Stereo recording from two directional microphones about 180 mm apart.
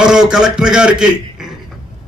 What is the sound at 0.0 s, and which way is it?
A man's voice, 5° right (ahead or behind).